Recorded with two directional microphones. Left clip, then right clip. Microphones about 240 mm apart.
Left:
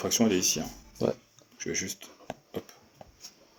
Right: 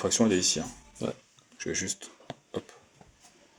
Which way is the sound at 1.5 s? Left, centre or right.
Right.